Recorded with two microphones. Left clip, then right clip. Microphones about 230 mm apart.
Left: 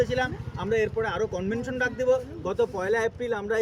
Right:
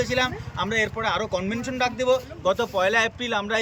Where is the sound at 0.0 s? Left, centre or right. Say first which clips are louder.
Right 2 dB; right.